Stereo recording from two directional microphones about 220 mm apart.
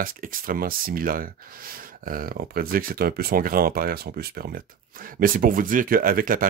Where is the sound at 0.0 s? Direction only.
40° right (ahead or behind).